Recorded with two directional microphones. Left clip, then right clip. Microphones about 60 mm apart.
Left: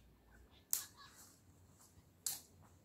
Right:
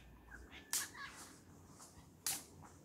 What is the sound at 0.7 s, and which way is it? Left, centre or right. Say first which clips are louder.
Whip: right 3 dB; left.